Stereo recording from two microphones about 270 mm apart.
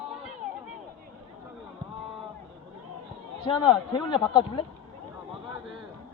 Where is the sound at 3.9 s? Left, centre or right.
Centre.